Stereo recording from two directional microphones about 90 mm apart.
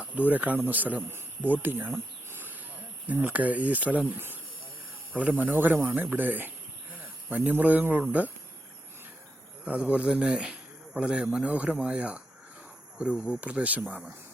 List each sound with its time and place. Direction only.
0.0 s speech: 15° right (ahead or behind)
1.5 s cricket: 20° right (ahead or behind)
3.1 s speech: 15° right (ahead or behind)
9.6 s speech: 15° right (ahead or behind)